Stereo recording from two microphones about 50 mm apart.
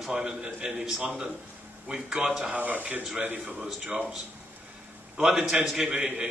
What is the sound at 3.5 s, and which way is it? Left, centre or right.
Speech, centre.